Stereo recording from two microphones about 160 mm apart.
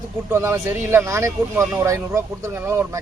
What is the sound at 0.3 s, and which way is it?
Speech, 15° right (ahead or behind).